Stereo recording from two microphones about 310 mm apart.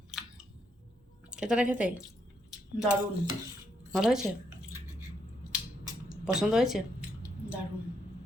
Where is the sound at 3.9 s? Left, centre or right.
Centre.